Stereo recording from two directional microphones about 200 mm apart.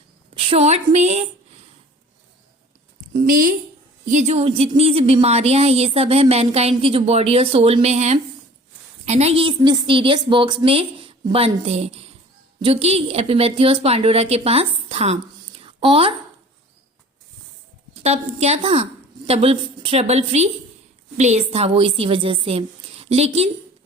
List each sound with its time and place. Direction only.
0.4 s speech: 30° right (ahead or behind)
3.1 s a woman's voice: 35° right (ahead or behind)
17.9 s a woman's voice: 30° right (ahead or behind)